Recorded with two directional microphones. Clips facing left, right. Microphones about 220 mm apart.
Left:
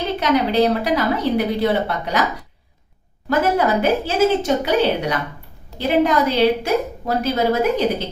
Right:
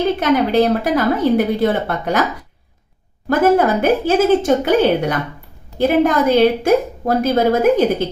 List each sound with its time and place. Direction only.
0.2 s a woman's voice: 50° right (ahead or behind)
3.2 s a woman's voice: 50° right (ahead or behind)